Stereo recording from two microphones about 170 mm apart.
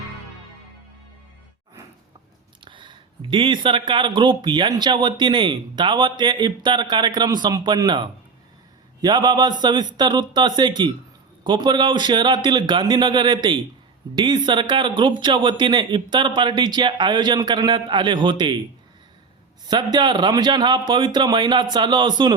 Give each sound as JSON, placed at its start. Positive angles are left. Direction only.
{"t": 2.6, "sound": "speech", "side_deg": -30}
{"t": 19.6, "sound": "speech", "side_deg": -25}